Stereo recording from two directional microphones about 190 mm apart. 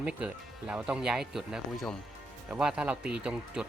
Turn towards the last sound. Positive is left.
turn(degrees=-5)  # may be behind; listen again after turning